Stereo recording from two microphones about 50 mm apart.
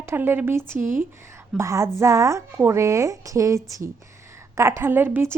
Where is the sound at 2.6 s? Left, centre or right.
Right.